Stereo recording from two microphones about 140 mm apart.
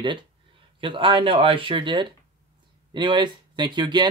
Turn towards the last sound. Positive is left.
turn(degrees=-30)  # may be behind; listen again after turning